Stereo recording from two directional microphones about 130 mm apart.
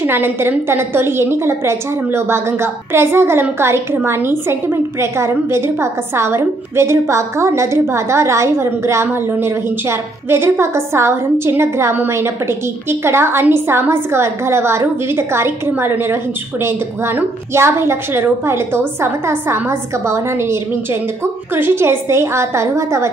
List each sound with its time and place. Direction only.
0.0 s a woman's voice: 15° right (ahead or behind)